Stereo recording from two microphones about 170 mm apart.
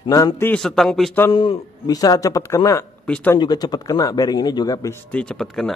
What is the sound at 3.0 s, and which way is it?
Speech, 10° left (ahead or behind).